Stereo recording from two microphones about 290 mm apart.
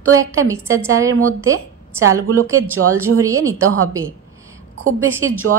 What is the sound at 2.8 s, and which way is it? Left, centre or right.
Speech, right.